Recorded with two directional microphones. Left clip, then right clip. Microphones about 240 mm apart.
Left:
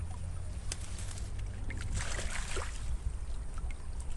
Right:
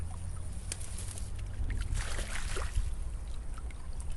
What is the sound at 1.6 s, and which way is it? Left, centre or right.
Boat, centre.